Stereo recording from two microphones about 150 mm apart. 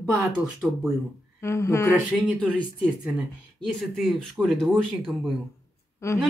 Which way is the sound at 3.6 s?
Centre (ahead or behind).